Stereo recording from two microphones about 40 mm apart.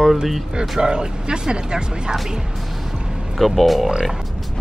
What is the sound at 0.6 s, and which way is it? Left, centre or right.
Speech, centre.